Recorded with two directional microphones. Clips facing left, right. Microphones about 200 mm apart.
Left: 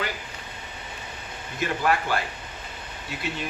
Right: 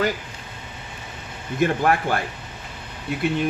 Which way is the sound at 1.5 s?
50° right (ahead or behind).